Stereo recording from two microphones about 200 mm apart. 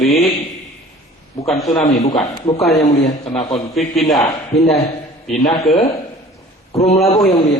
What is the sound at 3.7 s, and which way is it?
A man's voice, centre (ahead or behind).